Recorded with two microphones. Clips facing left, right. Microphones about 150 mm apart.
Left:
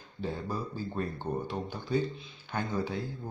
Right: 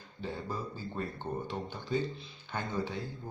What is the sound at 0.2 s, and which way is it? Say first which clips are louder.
Speech: left 3 dB; 15° left (ahead or behind).